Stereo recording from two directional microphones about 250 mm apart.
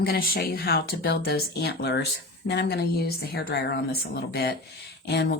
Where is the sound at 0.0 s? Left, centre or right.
Left.